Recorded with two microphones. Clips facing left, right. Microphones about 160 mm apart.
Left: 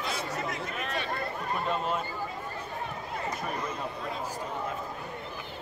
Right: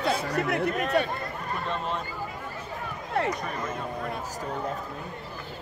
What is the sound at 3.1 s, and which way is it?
Speech, 75° right (ahead or behind).